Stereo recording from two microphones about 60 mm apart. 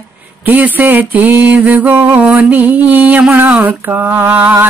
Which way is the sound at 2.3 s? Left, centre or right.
Right.